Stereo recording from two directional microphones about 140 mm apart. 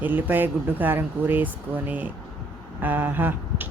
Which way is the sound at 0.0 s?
15° right (ahead or behind).